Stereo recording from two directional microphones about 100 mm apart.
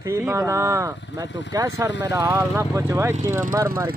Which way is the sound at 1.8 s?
30° right (ahead or behind).